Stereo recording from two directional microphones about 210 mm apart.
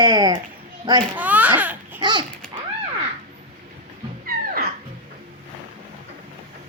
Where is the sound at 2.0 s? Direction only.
20° right (ahead or behind).